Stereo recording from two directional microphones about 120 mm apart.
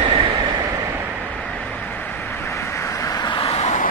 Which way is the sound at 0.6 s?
15° right (ahead or behind).